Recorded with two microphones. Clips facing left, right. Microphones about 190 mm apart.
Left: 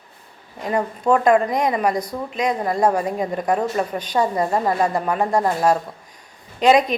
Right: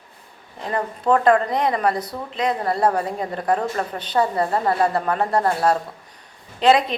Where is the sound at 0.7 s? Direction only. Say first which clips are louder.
Left 1 dB; 15° left (ahead or behind).